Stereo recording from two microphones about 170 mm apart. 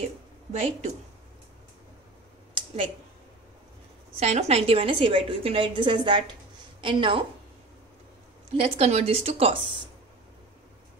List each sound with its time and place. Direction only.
0.5 s a woman's voice: 40° right (ahead or behind)
2.5 s a sound: 30° right (ahead or behind)
4.2 s a woman's voice: 40° right (ahead or behind)
8.6 s a woman's voice: 40° right (ahead or behind)